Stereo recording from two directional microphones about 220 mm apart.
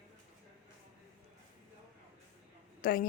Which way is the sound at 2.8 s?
40° left (ahead or behind).